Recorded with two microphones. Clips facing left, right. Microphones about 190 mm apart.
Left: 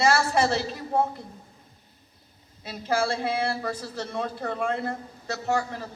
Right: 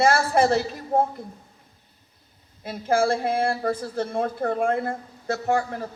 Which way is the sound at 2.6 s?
50° right (ahead or behind).